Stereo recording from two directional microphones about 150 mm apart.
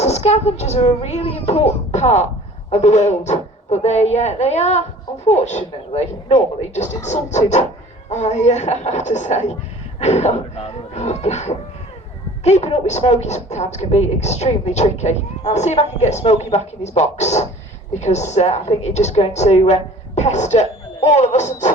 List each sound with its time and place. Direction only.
0.0 s a child's voice: 45° left (ahead or behind)